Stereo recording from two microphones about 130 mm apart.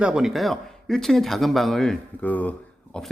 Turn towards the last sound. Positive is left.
turn(degrees=5)  # may be behind; listen again after turning